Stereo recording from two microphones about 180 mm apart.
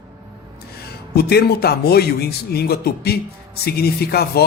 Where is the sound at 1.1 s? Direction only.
60° left (ahead or behind).